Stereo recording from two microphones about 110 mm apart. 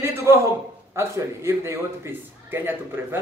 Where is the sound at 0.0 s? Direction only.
25° right (ahead or behind).